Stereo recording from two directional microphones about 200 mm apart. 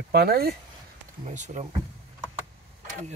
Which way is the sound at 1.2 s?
35° right (ahead or behind).